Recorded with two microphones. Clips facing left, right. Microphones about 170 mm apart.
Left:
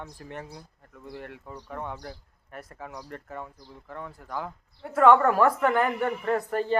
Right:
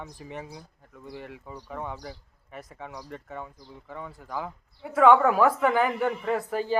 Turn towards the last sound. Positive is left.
turn(degrees=0)  # may be behind; listen again after turning